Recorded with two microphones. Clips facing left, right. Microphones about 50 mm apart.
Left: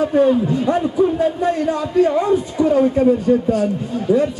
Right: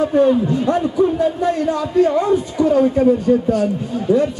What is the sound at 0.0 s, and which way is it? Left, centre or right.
A man's voice, centre.